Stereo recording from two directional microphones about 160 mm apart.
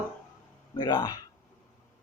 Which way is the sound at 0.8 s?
25° left (ahead or behind).